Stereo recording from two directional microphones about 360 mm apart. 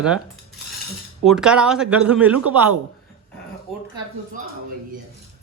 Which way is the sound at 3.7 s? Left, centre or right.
Centre.